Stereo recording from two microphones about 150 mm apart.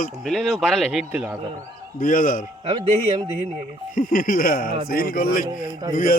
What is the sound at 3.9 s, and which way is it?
Speech, 65° left (ahead or behind).